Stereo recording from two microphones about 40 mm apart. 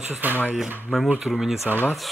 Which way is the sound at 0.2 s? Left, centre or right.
Right.